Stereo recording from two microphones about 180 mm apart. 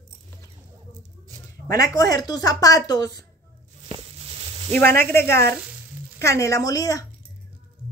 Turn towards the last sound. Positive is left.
turn(degrees=20)  # may be behind; listen again after turning